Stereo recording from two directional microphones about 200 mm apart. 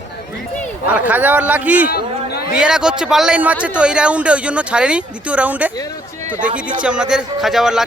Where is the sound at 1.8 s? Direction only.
50° left (ahead or behind).